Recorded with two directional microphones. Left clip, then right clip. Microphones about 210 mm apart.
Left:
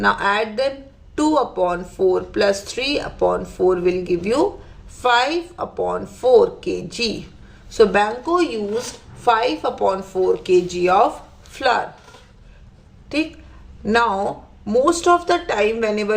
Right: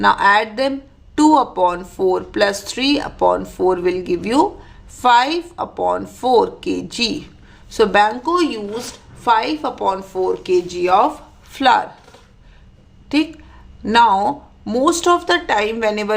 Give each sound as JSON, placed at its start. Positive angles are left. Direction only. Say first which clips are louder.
{"t": 0.0, "sound": "speech", "louder": "right 5 dB", "side_deg": -30}
{"t": 13.8, "sound": "speech", "louder": "right 5 dB", "side_deg": -30}